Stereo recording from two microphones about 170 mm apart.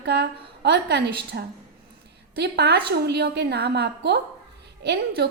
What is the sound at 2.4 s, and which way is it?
A woman's voice, 75° right (ahead or behind).